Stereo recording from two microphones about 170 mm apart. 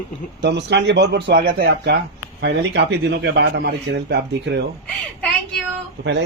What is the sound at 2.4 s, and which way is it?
A man's voice, 90° right.